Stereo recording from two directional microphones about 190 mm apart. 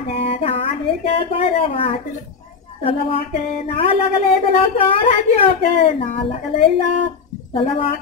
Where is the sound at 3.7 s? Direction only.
30° left (ahead or behind).